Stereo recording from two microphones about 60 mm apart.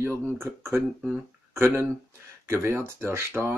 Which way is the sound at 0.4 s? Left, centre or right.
Right.